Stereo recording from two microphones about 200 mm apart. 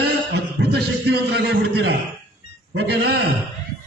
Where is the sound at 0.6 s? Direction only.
55° right (ahead or behind).